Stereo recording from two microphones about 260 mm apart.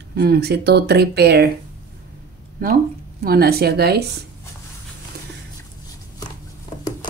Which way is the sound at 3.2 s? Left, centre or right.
Right.